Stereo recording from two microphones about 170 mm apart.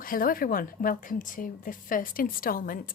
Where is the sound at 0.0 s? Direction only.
55° left (ahead or behind).